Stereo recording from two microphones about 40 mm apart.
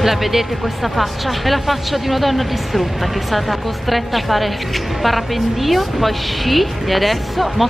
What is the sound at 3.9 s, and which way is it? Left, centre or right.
A woman's voice, centre.